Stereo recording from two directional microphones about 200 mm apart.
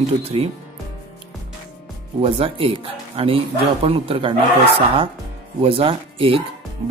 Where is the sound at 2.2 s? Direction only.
30° right (ahead or behind).